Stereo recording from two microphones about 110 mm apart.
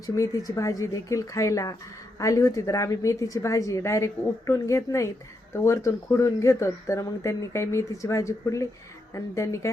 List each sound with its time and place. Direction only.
0.0 s speech: 30° left (ahead or behind)